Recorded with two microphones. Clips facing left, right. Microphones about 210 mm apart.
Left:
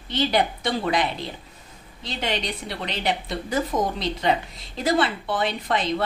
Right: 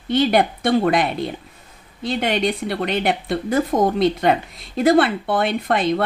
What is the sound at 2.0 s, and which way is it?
Speech, 55° right (ahead or behind).